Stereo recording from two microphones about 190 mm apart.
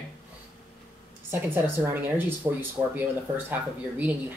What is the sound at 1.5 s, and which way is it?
Speech, 10° right (ahead or behind).